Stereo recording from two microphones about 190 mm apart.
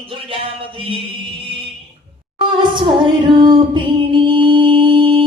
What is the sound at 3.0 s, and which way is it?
Music, 25° right (ahead or behind).